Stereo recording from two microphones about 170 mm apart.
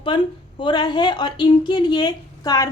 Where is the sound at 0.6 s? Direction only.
25° left (ahead or behind).